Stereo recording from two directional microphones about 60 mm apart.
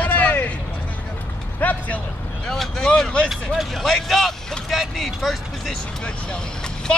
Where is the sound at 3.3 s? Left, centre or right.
Centre.